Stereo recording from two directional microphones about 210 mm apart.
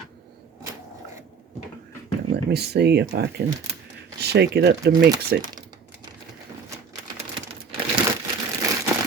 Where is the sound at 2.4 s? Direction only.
50° right (ahead or behind).